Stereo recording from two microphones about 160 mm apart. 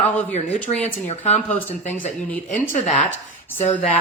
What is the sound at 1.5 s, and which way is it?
Speech, 10° left (ahead or behind).